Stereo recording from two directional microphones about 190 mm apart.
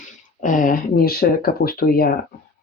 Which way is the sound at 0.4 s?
45° left (ahead or behind).